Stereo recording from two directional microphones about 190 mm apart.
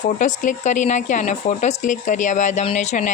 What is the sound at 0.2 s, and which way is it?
Speech, 40° left (ahead or behind).